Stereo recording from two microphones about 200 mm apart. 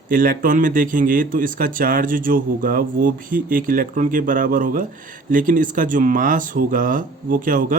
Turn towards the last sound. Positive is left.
turn(degrees=-45)  # may be behind; listen again after turning